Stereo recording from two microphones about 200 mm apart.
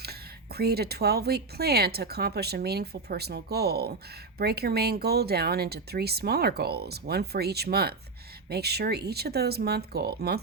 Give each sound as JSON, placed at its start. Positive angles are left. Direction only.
{"t": 0.0, "sound": "speech", "side_deg": -50}